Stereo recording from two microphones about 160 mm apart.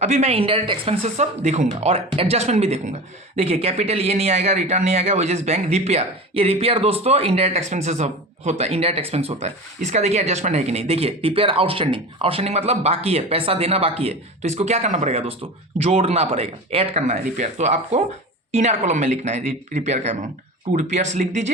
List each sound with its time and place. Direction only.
0.0 s speech: 45° right (ahead or behind)